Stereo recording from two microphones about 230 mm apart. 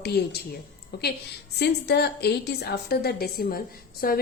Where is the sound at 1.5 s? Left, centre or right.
Left.